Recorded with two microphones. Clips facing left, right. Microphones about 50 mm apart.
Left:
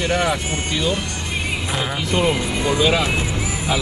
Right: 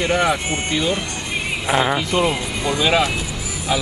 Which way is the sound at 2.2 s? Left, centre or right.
Centre.